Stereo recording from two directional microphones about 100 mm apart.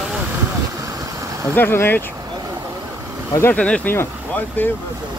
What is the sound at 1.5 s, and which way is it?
Speech, 20° left (ahead or behind).